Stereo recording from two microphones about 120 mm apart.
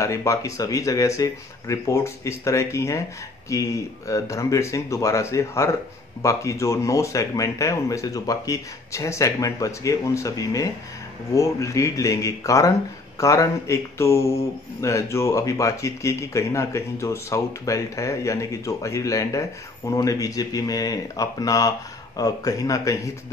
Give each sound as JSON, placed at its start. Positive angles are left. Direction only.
{"t": 0.0, "sound": "speech", "side_deg": 25}